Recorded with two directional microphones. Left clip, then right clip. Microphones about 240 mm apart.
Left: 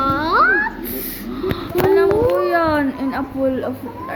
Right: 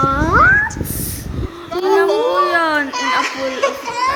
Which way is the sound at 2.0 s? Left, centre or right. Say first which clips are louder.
Right 3 dB; centre.